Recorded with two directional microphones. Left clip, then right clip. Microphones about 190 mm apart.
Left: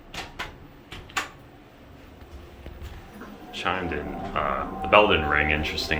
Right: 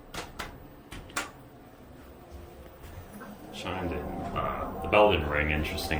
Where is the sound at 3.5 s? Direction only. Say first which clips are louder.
Left 10 dB; 5° right (ahead or behind).